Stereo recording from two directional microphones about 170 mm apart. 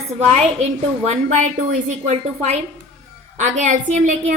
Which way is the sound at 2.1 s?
40° right (ahead or behind).